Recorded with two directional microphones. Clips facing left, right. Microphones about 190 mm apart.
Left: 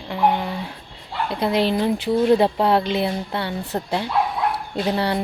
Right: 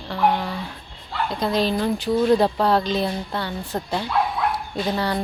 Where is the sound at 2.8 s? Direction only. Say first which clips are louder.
Left 1 dB; 65° left (ahead or behind).